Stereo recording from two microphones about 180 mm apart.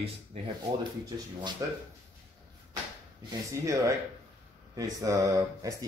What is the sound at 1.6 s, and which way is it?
Speech, 20° right (ahead or behind).